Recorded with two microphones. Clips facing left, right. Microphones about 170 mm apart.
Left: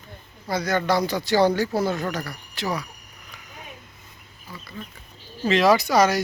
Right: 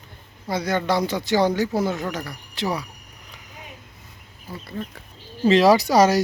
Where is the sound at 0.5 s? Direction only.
25° right (ahead or behind).